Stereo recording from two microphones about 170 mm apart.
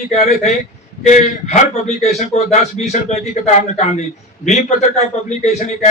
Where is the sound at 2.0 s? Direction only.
40° left (ahead or behind).